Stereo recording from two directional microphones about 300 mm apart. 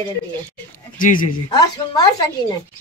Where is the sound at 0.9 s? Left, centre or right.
Left.